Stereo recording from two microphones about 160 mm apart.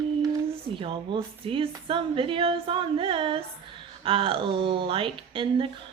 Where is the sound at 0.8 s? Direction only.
35° right (ahead or behind).